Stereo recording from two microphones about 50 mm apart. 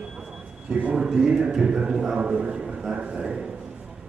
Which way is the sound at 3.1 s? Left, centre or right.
Centre.